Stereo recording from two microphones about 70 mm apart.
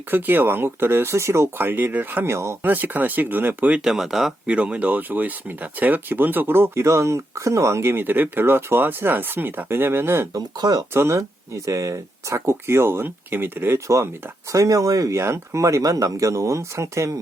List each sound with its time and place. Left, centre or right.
0.1 s speech: right
2.3 s speech: right
2.6 s speech: right
3.8 s speech: centre
4.4 s speech: centre
10.3 s speech: right
10.9 s speech: right
15.2 s speech: right